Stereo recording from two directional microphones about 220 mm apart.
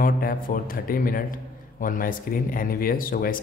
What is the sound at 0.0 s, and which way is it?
A man's voice, 40° left (ahead or behind).